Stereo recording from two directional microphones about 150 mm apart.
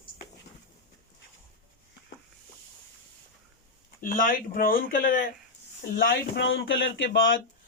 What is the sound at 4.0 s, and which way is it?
Speech, 65° left (ahead or behind).